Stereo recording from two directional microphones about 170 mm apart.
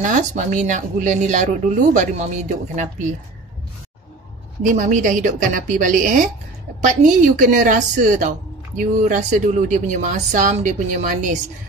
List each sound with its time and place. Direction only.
0.0 s a woman's voice: 45° right (ahead or behind)
4.6 s a woman's voice: 50° right (ahead or behind)